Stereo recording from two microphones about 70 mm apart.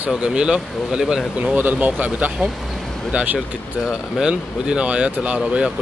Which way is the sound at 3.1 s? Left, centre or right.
Centre.